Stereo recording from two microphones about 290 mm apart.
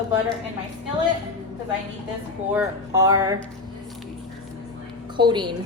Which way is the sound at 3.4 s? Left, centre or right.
Centre.